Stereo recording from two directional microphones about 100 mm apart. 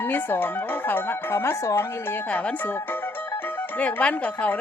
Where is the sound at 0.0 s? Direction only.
20° left (ahead or behind).